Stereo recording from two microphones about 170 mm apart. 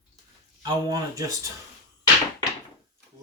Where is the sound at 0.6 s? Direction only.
20° right (ahead or behind).